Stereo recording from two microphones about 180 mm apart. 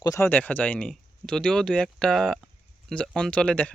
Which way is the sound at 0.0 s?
15° left (ahead or behind).